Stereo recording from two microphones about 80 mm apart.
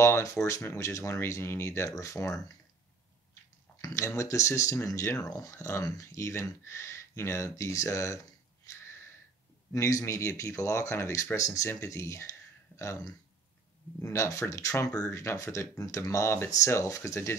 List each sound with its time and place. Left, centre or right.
0.0 s speech: left
3.8 s speech: left
8.6 s a sound: left
9.7 s speech: left
14.0 s speech: left